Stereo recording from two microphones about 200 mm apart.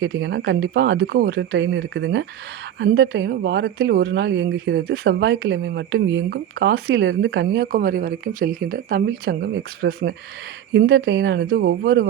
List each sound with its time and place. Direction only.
0.0 s speech: 55° right (ahead or behind)